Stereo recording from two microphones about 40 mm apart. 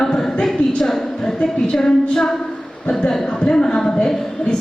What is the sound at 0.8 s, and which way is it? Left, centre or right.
A woman's voice, centre.